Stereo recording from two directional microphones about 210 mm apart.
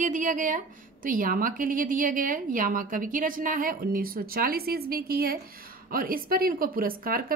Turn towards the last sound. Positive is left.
turn(degrees=-45)  # may be behind; listen again after turning